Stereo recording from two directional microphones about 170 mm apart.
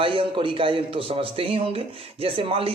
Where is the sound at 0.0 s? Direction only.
30° right (ahead or behind).